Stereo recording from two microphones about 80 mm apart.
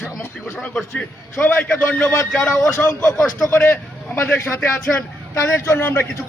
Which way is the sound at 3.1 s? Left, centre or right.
Centre.